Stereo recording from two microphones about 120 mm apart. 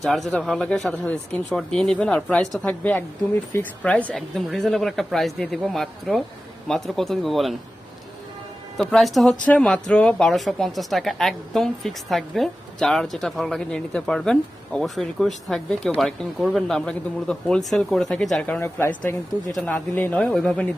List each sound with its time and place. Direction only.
0.0 s speech: centre (ahead or behind)
8.8 s speech: centre (ahead or behind)
18.6 s speech: 20° left (ahead or behind)